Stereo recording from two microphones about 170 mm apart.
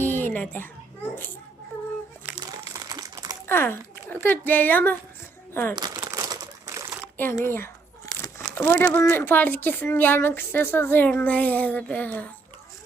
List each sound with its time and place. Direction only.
0.0 s a sound: 10° left (ahead or behind)
2.4 s crumpling: 20° right (ahead or behind)
3.4 s speech: 15° left (ahead or behind)
5.7 s crumpling: 25° right (ahead or behind)
7.2 s a sound: 15° left (ahead or behind)
8.5 s a woman's voice: 15° left (ahead or behind)